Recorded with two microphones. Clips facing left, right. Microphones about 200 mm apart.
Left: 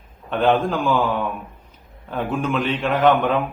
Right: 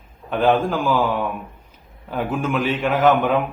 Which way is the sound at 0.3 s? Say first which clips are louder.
Even; 5° right (ahead or behind).